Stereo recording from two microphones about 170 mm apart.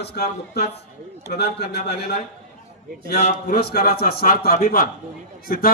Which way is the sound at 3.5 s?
65° left (ahead or behind).